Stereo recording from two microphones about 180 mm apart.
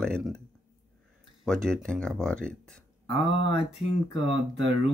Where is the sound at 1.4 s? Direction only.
5° left (ahead or behind).